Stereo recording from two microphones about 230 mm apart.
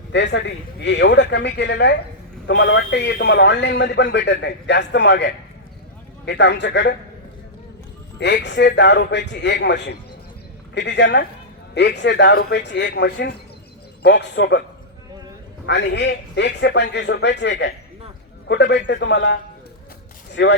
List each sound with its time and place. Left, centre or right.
0.1 s a man's voice: left
8.2 s a man's voice: left
15.6 s a man's voice: left